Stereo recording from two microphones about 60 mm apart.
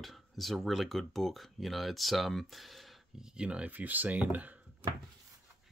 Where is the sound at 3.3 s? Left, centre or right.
Centre.